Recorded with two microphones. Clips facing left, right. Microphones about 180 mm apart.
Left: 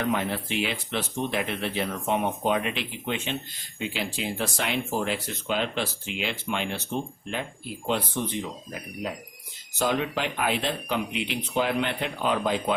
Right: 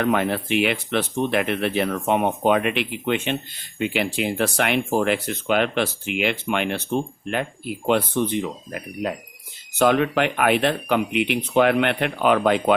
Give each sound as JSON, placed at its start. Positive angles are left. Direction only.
{"t": 0.0, "sound": "speech", "side_deg": -65}